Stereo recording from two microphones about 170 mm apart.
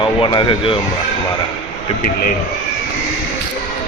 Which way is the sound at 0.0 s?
30° left (ahead or behind).